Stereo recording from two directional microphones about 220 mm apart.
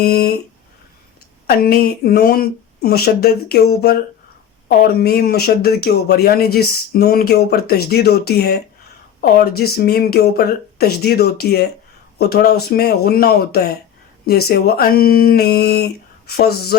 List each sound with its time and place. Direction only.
0.0 s speech: 45° left (ahead or behind)
1.5 s speech: 45° left (ahead or behind)